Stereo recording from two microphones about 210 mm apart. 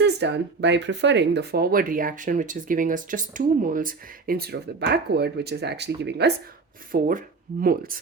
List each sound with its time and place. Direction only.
0.0 s speech: 55° right (ahead or behind)
6.9 s speech: 40° right (ahead or behind)